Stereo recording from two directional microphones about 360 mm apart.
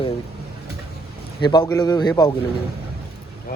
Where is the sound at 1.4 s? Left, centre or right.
Centre.